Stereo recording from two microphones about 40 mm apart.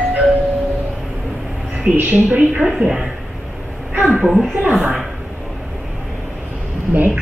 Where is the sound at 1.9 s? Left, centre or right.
Right.